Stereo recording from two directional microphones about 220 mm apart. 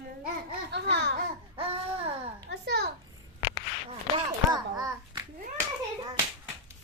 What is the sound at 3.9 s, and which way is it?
Babbling, 20° right (ahead or behind).